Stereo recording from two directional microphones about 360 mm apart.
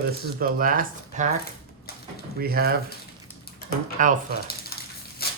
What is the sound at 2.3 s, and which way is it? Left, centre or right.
Speech, right.